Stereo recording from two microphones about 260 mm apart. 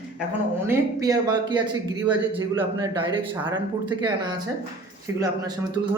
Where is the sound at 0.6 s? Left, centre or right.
Centre.